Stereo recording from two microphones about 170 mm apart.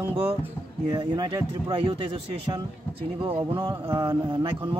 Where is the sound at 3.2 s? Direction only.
30° right (ahead or behind).